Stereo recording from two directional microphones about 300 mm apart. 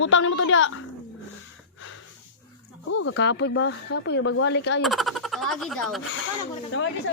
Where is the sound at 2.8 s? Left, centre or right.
Left.